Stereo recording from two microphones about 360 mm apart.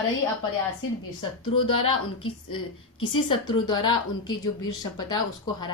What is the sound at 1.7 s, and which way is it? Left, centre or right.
Speech, left.